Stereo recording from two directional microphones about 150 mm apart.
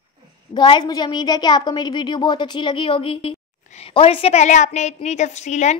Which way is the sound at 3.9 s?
35° left (ahead or behind).